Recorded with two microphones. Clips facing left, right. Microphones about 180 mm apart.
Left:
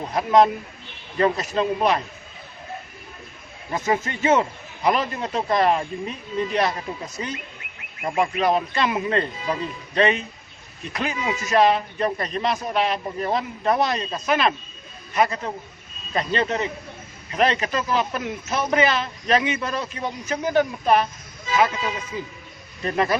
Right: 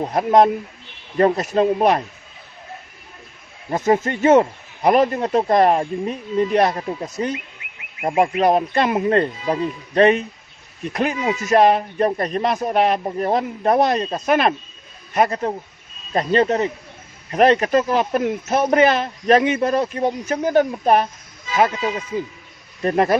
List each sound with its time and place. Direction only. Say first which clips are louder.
0.1 s speech: right 2 dB; 50° right (ahead or behind)
3.8 s speech: right 6 dB; 50° right (ahead or behind)
7.3 s bird: right 3 dB; 15° right (ahead or behind)
8.4 s speech: right 4 dB; 50° right (ahead or behind)
22.8 s speech: right 5 dB; 50° right (ahead or behind)